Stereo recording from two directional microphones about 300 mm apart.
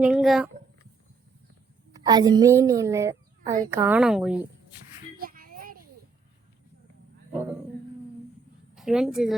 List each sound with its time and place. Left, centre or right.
0.0 s speech: centre
1.9 s a woman's voice: centre
5.1 s a sound: right
8.7 s speech: centre